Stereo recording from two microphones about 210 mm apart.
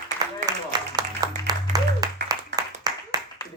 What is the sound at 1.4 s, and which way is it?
Applause, 20° right (ahead or behind).